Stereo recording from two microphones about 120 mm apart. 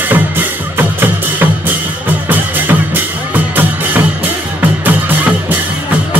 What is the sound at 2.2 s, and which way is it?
Music, 15° right (ahead or behind).